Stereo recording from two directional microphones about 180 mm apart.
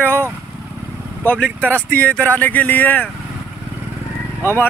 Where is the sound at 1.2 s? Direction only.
10° left (ahead or behind).